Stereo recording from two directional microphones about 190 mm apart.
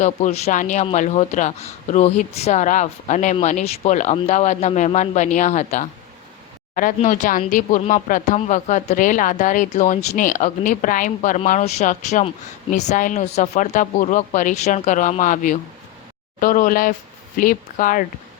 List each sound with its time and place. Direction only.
0.0 s speech: 35° left (ahead or behind)